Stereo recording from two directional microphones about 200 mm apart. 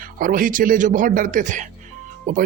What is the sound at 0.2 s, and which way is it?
Speech, 45° right (ahead or behind).